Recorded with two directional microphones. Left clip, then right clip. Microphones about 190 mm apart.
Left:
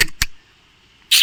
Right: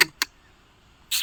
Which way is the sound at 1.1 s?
Centre (ahead or behind).